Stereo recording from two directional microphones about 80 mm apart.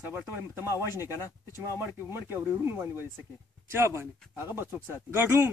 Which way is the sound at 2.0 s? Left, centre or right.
Right.